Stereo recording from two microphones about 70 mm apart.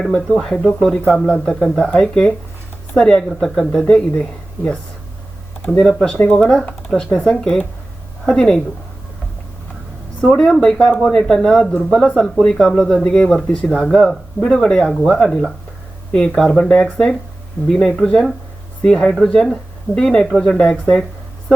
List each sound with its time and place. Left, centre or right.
0.0 s speech: centre
3.2 s speech: centre
10.2 s speech: centre
16.5 s speech: centre